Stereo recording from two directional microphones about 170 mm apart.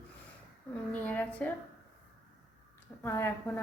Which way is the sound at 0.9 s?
10° left (ahead or behind).